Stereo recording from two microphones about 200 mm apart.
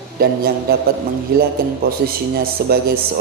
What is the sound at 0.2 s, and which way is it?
A man's voice, 50° right (ahead or behind).